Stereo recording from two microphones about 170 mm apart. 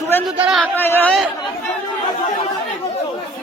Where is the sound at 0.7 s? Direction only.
10° left (ahead or behind).